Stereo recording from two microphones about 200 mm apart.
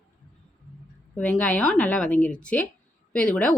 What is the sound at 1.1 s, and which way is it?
Speech, 5° left (ahead or behind).